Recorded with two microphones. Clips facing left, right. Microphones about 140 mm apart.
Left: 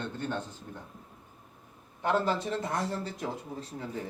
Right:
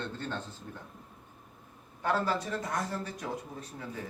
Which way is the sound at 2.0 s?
20° left (ahead or behind).